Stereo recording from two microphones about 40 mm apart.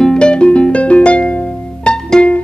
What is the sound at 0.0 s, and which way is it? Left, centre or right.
Music, left.